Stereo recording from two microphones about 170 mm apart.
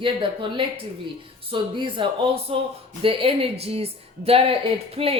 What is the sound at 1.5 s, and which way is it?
A woman's voice, 30° right (ahead or behind).